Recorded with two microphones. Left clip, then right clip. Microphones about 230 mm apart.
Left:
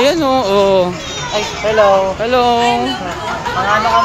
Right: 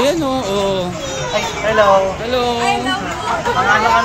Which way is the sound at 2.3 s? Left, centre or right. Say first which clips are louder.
Left 5 dB; centre.